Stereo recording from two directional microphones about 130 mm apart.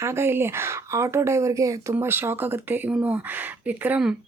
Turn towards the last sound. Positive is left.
turn(degrees=-10)  # may be behind; listen again after turning